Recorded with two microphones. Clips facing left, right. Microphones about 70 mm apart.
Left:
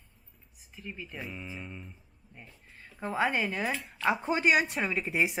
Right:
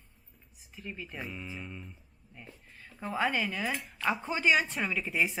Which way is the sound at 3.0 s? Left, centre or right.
Left.